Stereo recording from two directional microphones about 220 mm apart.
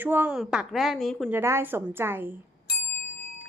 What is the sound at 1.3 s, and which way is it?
Speech, 10° right (ahead or behind).